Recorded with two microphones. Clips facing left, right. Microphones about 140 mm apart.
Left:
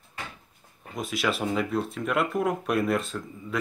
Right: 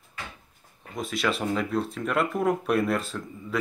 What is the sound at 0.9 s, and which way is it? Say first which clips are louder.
Speech: even; centre (ahead or behind).